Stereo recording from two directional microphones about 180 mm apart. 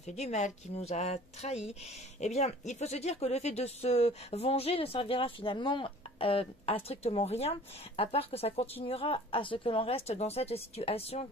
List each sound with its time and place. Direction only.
0.2 s speech: 40° left (ahead or behind)